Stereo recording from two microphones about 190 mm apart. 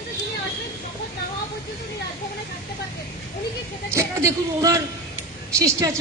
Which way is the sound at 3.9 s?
15° right (ahead or behind).